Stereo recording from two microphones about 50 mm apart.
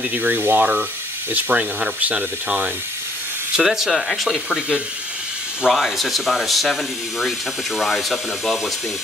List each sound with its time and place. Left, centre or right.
0.1 s speech: right
3.5 s speech: centre
4.5 s speech: centre
5.7 s speech: centre